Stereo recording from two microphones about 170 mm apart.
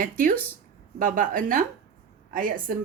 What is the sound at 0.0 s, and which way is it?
A woman's voice, 55° right (ahead or behind).